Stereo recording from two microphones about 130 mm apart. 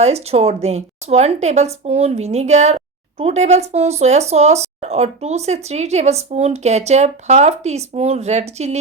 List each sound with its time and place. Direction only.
0.0 s speech: 55° right (ahead or behind)